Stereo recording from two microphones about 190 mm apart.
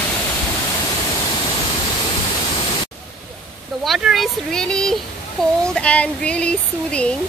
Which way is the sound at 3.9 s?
Centre (ahead or behind).